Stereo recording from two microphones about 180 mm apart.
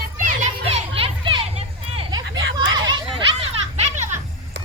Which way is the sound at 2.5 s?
25° right (ahead or behind).